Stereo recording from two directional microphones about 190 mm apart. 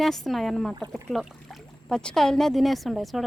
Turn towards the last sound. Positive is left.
turn(degrees=0)  # may be behind; listen again after turning